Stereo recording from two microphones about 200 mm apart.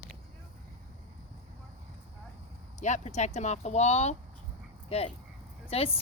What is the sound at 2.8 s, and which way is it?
Speech, 35° left (ahead or behind).